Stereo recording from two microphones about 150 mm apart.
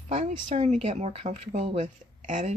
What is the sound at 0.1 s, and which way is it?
Speech, 50° right (ahead or behind).